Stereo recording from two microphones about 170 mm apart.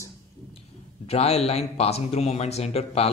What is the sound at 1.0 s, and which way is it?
A man's voice, 40° left (ahead or behind).